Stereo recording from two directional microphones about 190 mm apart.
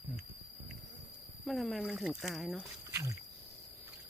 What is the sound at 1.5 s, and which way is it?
Speech, centre (ahead or behind).